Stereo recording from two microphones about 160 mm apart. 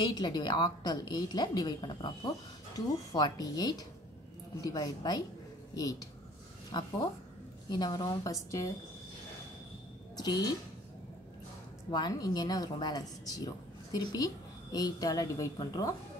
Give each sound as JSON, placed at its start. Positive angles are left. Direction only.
{"t": 0.0, "sound": "a woman's voice", "side_deg": 25}
{"t": 10.1, "sound": "a woman's voice", "side_deg": 25}
{"t": 11.9, "sound": "a woman's voice", "side_deg": 25}